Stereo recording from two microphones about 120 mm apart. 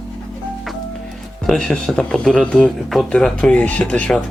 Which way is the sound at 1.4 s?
5° left (ahead or behind).